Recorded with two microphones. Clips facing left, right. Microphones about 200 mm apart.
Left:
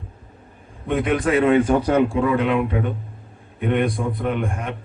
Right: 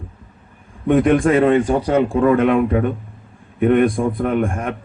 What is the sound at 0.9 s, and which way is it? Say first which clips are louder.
Speech: right 6 dB; 50° right (ahead or behind).